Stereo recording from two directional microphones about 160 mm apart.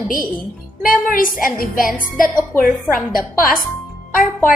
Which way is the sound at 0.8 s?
60° left (ahead or behind).